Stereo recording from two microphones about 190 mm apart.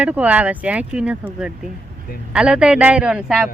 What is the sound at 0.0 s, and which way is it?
A woman's voice, 5° right (ahead or behind).